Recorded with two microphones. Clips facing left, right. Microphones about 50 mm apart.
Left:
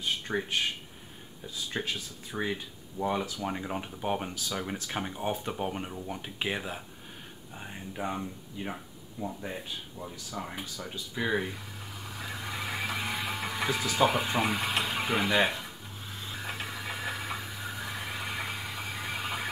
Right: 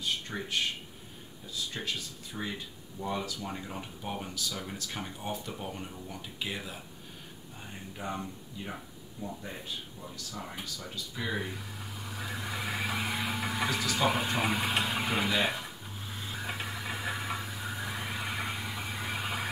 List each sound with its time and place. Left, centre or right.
0.0 s speech: left
1.8 s speech: left
7.5 s speech: left
11.4 s neigh: centre
13.7 s speech: centre
14.2 s speech: centre
16.3 s vehicle: centre